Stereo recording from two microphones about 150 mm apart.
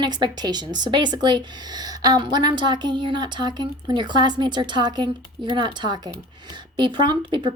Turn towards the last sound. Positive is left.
turn(degrees=-35)  # may be behind; listen again after turning